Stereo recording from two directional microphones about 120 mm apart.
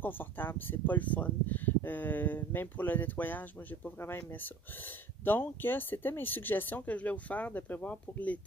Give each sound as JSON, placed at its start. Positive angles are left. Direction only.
{"t": 0.0, "sound": "speech", "side_deg": 15}